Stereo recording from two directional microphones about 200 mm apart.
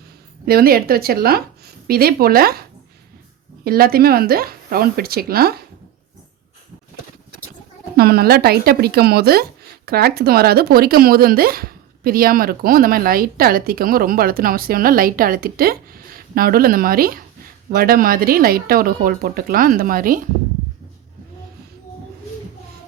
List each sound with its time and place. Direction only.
0.4 s speech: 50° right (ahead or behind)
7.9 s speech: 50° right (ahead or behind)